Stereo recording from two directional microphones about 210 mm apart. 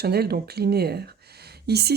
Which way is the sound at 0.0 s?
50° right (ahead or behind).